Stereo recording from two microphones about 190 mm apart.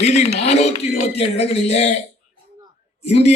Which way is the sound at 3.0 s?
35° left (ahead or behind).